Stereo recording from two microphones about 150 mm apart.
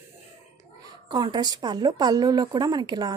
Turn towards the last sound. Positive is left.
turn(degrees=-25)  # may be behind; listen again after turning